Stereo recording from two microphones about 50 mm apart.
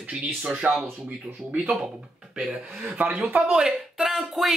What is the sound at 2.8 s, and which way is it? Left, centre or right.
Speech, right.